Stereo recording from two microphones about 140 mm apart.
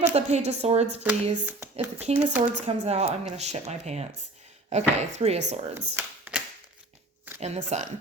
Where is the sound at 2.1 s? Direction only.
50° right (ahead or behind).